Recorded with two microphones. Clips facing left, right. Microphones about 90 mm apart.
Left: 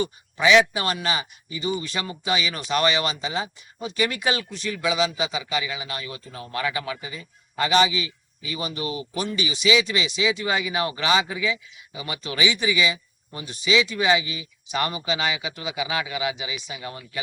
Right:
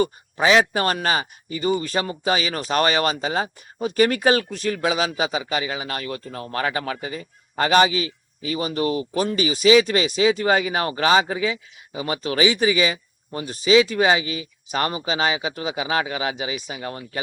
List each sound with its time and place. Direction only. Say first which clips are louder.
0.0 s a man's voice: right 2 dB; 40° right (ahead or behind)